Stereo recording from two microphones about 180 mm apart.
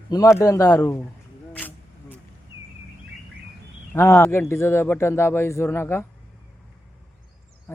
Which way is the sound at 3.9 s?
10° left (ahead or behind).